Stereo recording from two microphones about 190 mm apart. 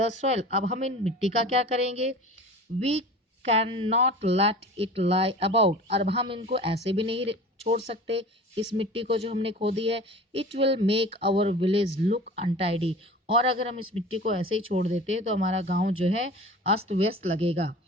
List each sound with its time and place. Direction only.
0.2 s speech: 35° right (ahead or behind)